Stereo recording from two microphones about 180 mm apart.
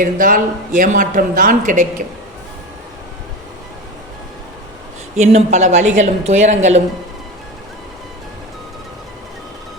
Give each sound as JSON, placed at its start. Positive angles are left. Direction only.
{"t": 0.0, "sound": "speech", "side_deg": -50}
{"t": 5.1, "sound": "a woman's voice", "side_deg": -40}